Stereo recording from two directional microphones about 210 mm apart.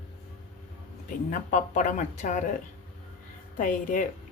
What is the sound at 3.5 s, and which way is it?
Speech, 40° left (ahead or behind).